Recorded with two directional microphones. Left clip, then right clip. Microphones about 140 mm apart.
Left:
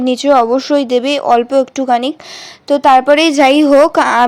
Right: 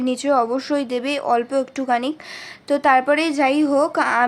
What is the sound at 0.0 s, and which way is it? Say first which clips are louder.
A woman's voice: left 8 dB; 35° left (ahead or behind).